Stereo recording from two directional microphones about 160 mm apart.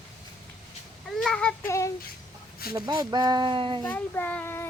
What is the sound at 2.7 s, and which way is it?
Speech, 25° right (ahead or behind).